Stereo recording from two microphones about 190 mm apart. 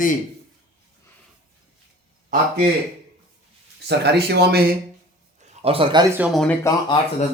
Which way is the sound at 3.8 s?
60° right (ahead or behind).